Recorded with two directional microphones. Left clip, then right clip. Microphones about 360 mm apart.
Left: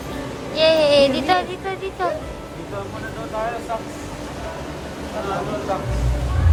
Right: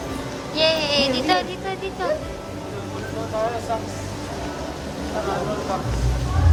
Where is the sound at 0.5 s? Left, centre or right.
Centre.